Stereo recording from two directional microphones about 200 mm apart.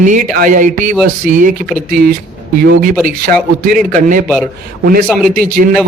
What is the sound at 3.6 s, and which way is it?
Speech, 40° right (ahead or behind).